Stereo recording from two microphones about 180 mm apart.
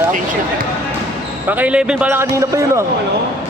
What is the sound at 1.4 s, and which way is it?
A man's voice, 10° right (ahead or behind).